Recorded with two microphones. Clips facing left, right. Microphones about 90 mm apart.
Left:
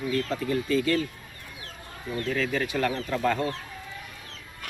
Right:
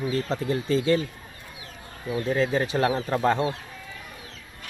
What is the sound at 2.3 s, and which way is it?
Speech, 30° right (ahead or behind).